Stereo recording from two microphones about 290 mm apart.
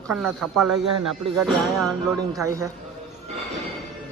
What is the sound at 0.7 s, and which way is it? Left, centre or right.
Speech, right.